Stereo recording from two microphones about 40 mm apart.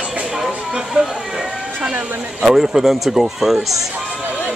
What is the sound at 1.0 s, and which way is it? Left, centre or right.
Speech, right.